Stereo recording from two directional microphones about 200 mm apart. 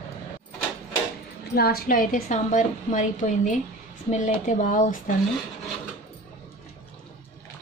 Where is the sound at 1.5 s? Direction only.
50° left (ahead or behind).